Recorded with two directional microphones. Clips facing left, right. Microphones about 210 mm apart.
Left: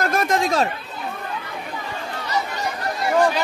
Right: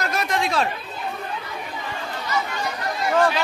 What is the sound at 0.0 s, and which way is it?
Chatter, 50° left (ahead or behind).